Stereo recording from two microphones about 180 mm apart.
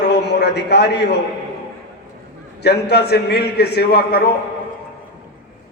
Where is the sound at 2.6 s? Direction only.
65° left (ahead or behind).